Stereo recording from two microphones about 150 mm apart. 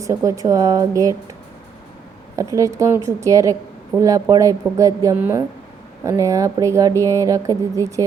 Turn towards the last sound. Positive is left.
turn(degrees=-20)  # may be behind; listen again after turning